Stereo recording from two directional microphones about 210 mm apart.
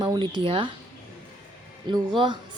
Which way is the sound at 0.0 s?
20° right (ahead or behind).